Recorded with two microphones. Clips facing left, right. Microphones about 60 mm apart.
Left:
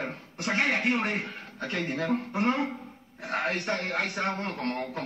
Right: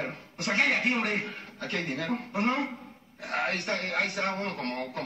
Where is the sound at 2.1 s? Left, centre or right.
Centre.